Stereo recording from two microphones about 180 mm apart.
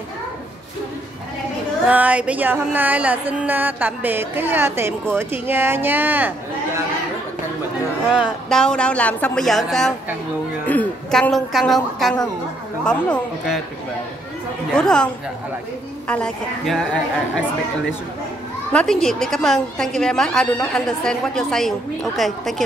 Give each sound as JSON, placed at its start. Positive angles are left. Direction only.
{"t": 1.9, "sound": "music", "side_deg": -10}
{"t": 8.1, "sound": "a woman's voice", "side_deg": 0}
{"t": 14.7, "sound": "a woman's voice", "side_deg": 5}
{"t": 16.1, "sound": "a woman's voice", "side_deg": 5}
{"t": 18.7, "sound": "a woman's voice", "side_deg": 5}